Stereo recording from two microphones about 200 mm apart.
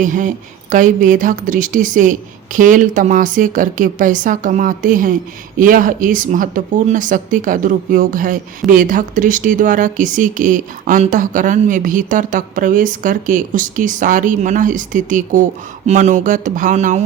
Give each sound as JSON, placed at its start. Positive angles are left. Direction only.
{"t": 0.0, "sound": "speech", "side_deg": -40}